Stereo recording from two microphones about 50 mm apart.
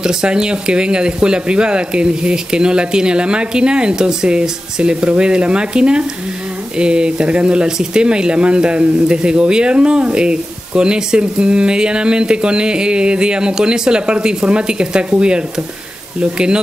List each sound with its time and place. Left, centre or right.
0.0 s speech: centre